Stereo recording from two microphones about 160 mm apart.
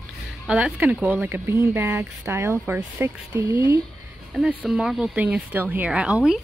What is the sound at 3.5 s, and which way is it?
Speech, 30° left (ahead or behind).